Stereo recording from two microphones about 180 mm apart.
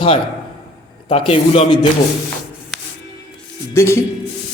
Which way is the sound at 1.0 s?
30° left (ahead or behind).